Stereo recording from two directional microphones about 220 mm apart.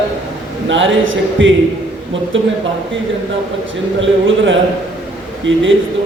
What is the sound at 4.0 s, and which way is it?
Speech, 60° right (ahead or behind).